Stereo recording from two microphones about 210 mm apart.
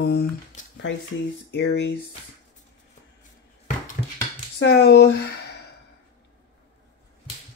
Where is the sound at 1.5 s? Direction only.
55° left (ahead or behind).